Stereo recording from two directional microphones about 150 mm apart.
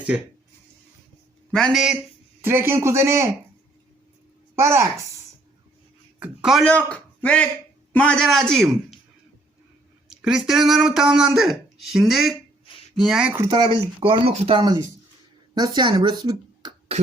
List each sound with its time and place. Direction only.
1.5 s speech: 5° left (ahead or behind)
2.4 s a man's voice: 15° right (ahead or behind)
4.5 s a woman's voice: 20° right (ahead or behind)
6.1 s a man's voice: 5° right (ahead or behind)
6.7 s a man's voice: 10° left (ahead or behind)
10.1 s speech: 5° right (ahead or behind)
13.5 s speech: 30° right (ahead or behind)